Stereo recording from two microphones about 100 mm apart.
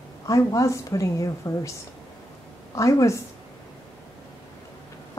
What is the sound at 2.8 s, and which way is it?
Speech, 30° left (ahead or behind).